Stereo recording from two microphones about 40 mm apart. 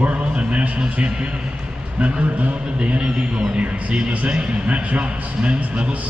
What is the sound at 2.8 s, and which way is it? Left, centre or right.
A man's voice, right.